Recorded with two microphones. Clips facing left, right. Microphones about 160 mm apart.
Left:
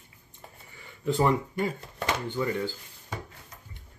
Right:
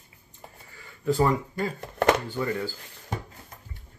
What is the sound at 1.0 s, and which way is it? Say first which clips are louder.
Speech: right 1 dB; 15° left (ahead or behind).